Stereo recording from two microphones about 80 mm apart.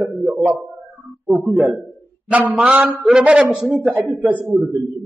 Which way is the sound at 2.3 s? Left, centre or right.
Centre.